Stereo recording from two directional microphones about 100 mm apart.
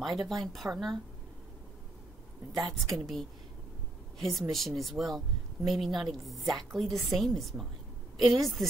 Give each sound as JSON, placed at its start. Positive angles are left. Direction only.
{"t": 0.0, "sound": "a woman's voice", "side_deg": 0}
{"t": 2.6, "sound": "a woman's voice", "side_deg": 0}